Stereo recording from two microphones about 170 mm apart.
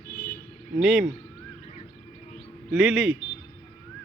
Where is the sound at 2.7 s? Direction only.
Centre (ahead or behind).